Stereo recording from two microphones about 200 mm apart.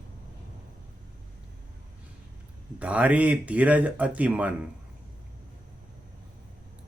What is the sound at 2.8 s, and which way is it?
Speech, 5° right (ahead or behind).